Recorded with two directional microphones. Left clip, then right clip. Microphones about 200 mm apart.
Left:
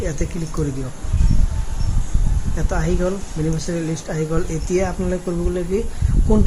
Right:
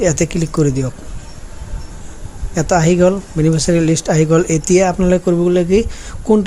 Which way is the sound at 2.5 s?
40° right (ahead or behind).